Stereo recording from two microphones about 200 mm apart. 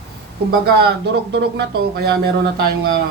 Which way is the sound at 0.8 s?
50° right (ahead or behind).